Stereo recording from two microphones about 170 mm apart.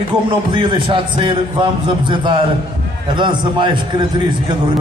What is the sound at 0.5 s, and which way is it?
A man's voice, 30° right (ahead or behind).